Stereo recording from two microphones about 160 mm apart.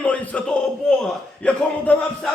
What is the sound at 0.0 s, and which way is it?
A man's voice, 10° left (ahead or behind).